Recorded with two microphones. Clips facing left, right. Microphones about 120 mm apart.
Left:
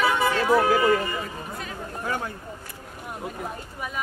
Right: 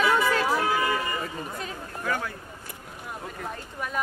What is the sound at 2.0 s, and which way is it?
Speech, 25° left (ahead or behind).